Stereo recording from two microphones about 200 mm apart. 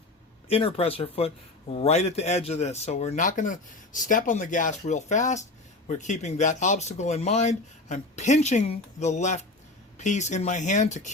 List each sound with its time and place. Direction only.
0.4 s speech: 30° left (ahead or behind)